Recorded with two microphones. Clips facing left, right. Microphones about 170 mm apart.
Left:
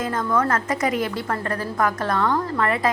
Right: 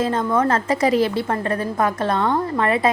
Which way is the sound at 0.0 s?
30° right (ahead or behind).